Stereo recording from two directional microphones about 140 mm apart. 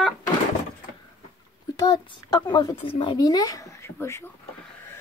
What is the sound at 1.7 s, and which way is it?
Speech, 30° left (ahead or behind).